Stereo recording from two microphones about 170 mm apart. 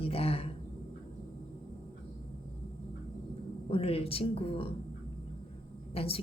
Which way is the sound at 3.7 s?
35° left (ahead or behind).